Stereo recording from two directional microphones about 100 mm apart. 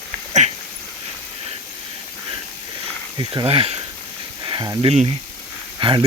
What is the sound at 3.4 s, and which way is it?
Speech, 80° right.